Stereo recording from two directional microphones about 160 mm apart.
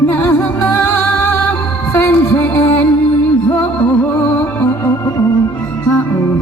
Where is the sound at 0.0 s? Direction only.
15° left (ahead or behind).